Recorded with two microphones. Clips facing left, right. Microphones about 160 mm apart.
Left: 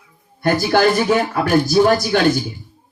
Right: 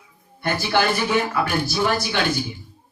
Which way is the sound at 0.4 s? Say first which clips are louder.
Left 6 dB; 40° left (ahead or behind).